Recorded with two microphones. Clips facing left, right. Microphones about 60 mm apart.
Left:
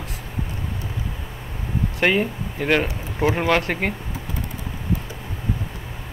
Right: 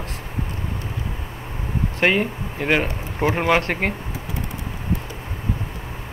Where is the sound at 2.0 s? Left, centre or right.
Centre.